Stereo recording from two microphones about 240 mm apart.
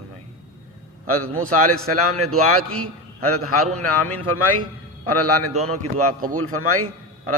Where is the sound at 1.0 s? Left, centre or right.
Right.